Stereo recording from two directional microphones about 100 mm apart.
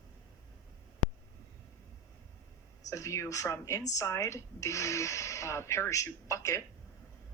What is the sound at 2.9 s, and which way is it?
A woman's voice, 30° left (ahead or behind).